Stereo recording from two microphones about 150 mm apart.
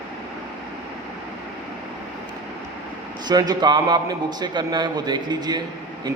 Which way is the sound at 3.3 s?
30° right (ahead or behind).